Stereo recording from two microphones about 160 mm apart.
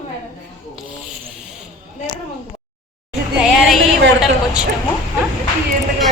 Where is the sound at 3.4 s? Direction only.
Centre (ahead or behind).